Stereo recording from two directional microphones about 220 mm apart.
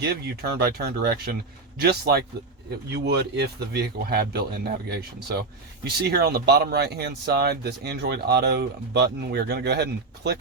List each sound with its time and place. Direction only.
0.6 s speech: 45° right (ahead or behind)